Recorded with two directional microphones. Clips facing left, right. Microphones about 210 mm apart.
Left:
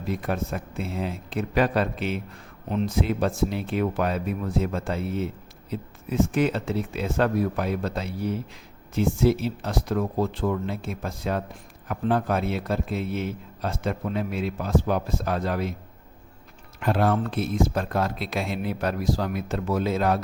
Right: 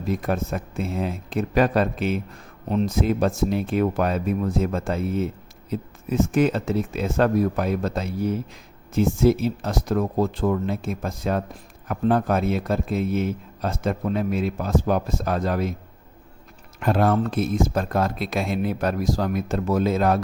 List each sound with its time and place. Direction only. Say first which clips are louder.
0.1 s a man's voice: right 3 dB; 45° right (ahead or behind)
16.8 s a man's voice: right 3 dB; 45° right (ahead or behind)